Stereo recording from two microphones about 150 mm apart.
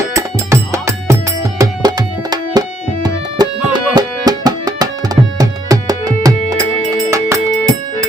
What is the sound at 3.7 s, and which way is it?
Tabla, 25° right (ahead or behind).